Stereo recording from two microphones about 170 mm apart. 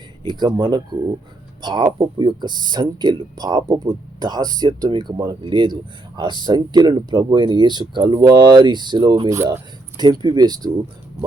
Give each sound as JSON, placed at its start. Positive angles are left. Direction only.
{"t": 0.3, "sound": "speech", "side_deg": -25}